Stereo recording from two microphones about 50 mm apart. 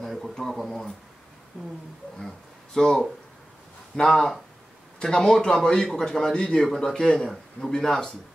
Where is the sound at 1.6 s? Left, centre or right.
Centre.